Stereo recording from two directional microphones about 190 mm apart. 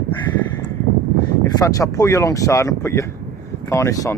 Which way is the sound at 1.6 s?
15° left (ahead or behind).